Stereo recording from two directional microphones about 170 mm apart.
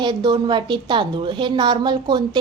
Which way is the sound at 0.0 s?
25° right (ahead or behind).